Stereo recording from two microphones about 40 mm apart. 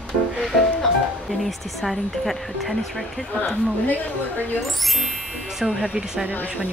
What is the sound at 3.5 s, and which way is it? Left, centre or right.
Speech, left.